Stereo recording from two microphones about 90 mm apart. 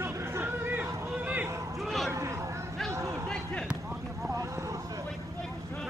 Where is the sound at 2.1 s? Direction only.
35° right (ahead or behind).